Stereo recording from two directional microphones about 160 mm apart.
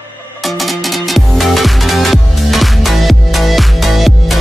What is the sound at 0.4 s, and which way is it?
Music, centre (ahead or behind).